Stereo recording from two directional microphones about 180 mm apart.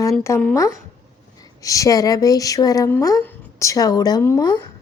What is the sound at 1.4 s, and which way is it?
A woman's voice, 20° left (ahead or behind).